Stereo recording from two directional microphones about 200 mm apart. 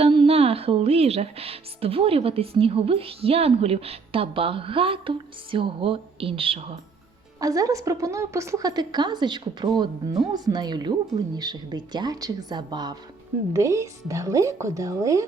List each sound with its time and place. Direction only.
0.0 s speech: 25° right (ahead or behind)
7.3 s a woman's voice: 15° right (ahead or behind)